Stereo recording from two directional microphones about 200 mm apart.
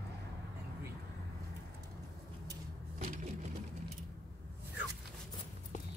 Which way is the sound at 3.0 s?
45° right (ahead or behind).